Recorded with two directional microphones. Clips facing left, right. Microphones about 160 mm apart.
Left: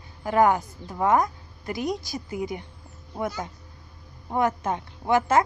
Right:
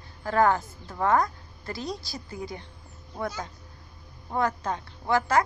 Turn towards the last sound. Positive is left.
turn(degrees=20)  # may be behind; listen again after turning